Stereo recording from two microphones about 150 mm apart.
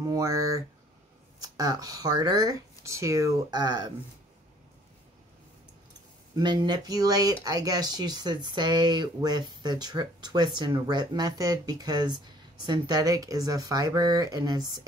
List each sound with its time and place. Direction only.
0.0 s a sound: 25° right (ahead or behind)
1.4 s speech: 25° right (ahead or behind)
6.3 s speech: 30° right (ahead or behind)